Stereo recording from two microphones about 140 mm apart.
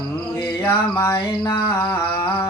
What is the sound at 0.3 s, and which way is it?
Mantra, 20° left (ahead or behind).